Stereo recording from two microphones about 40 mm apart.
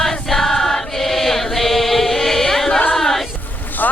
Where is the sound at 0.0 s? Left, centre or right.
Centre.